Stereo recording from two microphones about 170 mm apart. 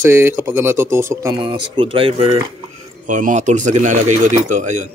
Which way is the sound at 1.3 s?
30° right (ahead or behind).